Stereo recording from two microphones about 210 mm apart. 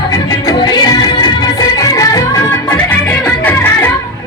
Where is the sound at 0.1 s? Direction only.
20° left (ahead or behind).